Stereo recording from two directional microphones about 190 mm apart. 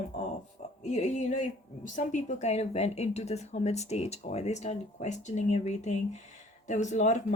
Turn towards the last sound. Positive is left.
turn(degrees=40)  # may be behind; listen again after turning